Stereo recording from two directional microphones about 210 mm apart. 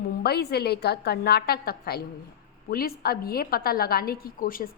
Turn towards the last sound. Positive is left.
turn(degrees=40)  # may be behind; listen again after turning